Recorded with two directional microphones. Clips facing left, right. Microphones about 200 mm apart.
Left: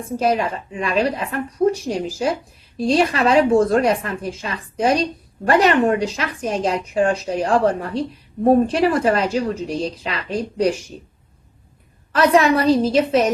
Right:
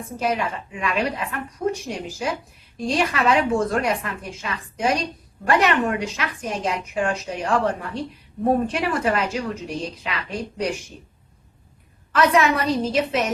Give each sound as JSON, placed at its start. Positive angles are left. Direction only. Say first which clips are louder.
{"t": 0.2, "sound": "speech", "louder": "left 4 dB", "side_deg": 35}
{"t": 12.1, "sound": "speech", "louder": "left 4 dB", "side_deg": 35}